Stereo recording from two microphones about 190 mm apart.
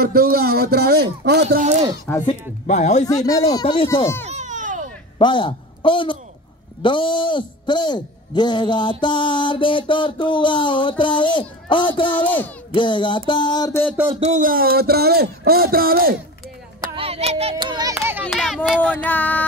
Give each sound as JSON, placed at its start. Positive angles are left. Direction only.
{"t": 0.0, "sound": "speech", "side_deg": -55}
{"t": 1.5, "sound": "speech", "side_deg": -40}
{"t": 2.2, "sound": "speech", "side_deg": 35}
{"t": 3.1, "sound": "a man's voice", "side_deg": 20}
{"t": 3.8, "sound": "speech", "side_deg": 15}
{"t": 4.3, "sound": "a sound", "side_deg": -40}
{"t": 5.2, "sound": "a man's voice", "side_deg": 25}
{"t": 12.1, "sound": "speech", "side_deg": 10}
{"t": 12.7, "sound": "a man's voice", "side_deg": 25}
{"t": 14.2, "sound": "a sound", "side_deg": -45}
{"t": 16.8, "sound": "music", "side_deg": -30}
{"t": 17.9, "sound": "speech", "side_deg": -10}
{"t": 18.3, "sound": "speech", "side_deg": 0}